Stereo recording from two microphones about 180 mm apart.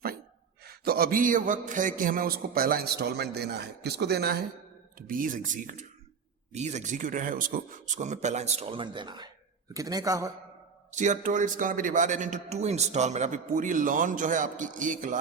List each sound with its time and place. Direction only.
0.6 s a man's voice: 55° right (ahead or behind)
4.9 s a man's voice: 50° right (ahead or behind); by 10.3 s 20° right (ahead or behind)
10.9 s a man's voice: 40° right (ahead or behind)